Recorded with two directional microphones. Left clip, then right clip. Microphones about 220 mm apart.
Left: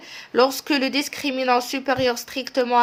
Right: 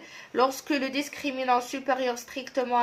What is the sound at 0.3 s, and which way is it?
Speech, 45° left (ahead or behind).